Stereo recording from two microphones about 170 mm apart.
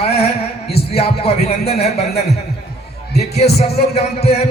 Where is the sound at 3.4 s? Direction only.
70° left (ahead or behind).